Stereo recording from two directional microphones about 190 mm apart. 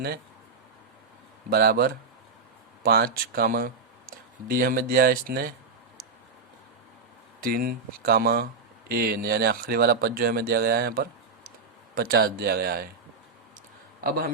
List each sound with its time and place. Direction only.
1.5 s speech: 55° right (ahead or behind)
7.4 s speech: 50° right (ahead or behind)